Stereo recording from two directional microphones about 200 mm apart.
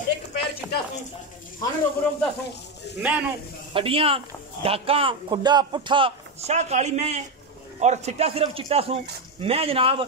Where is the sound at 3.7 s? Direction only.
25° right (ahead or behind).